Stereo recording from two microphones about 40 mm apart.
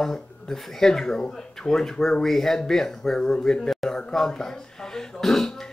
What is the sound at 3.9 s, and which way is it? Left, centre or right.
Throat clearing, centre.